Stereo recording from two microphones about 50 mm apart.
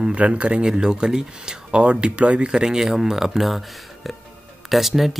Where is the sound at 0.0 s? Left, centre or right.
Right.